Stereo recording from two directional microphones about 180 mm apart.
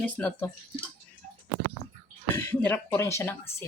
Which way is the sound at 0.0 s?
10° left (ahead or behind).